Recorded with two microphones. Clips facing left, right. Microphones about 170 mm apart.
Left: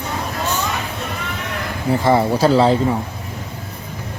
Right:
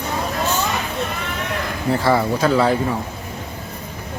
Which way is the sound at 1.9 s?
20° left (ahead or behind).